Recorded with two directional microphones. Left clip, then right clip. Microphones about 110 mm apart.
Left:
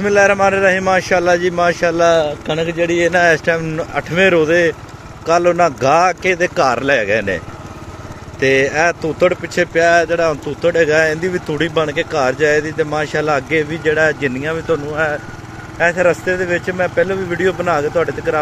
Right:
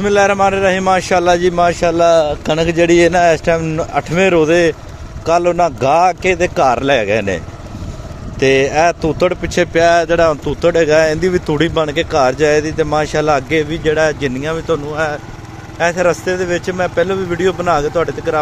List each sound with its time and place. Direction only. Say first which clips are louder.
0.0 s a man's voice: even; 25° right (ahead or behind)
0.8 s speech: right 1 dB; 35° right (ahead or behind)
2.1 s speech: right 3 dB; 90° right
3.1 s speech: right 1 dB; 45° right (ahead or behind)
9.3 s speech: right 2 dB; 70° right (ahead or behind); by 11.5 s 50° right (ahead or behind)
11.5 s speech: right 2 dB; 70° right (ahead or behind)
12.1 s speech: right 4 dB; 55° right (ahead or behind)
13.5 s speech: right 1 dB; 50° right (ahead or behind)
13.9 s speech: left 1 dB; 35° right (ahead or behind)
15.8 s a man's voice: even; 25° right (ahead or behind)
17.6 s a man's voice: right 1 dB; 25° right (ahead or behind)